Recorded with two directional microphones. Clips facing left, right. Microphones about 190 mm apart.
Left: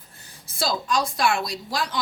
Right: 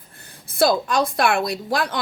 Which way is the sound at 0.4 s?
55° right (ahead or behind).